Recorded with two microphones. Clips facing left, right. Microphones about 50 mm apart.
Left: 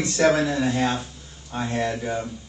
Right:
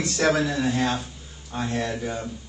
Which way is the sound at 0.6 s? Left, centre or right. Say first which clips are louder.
Left 1 dB; centre.